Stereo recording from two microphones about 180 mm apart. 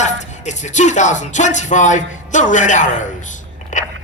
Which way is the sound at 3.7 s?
45° left (ahead or behind).